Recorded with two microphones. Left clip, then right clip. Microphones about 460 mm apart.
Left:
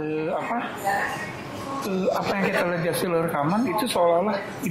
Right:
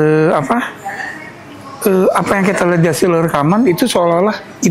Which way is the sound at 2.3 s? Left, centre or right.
Right.